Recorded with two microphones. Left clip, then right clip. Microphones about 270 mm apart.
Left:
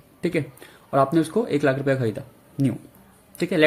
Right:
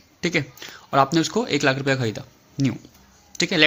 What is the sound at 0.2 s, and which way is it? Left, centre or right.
Speech, centre.